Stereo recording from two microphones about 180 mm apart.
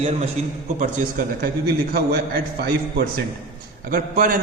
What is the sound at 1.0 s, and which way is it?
A man's voice, 50° right (ahead or behind).